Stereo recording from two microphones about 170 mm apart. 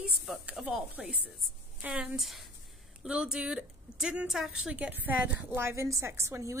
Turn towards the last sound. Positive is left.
turn(degrees=-15)  # may be behind; listen again after turning